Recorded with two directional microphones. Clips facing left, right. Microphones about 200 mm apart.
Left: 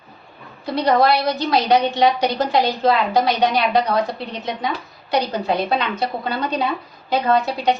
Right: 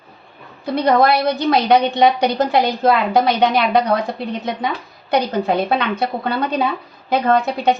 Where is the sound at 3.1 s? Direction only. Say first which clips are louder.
Right 2 dB; 60° right (ahead or behind).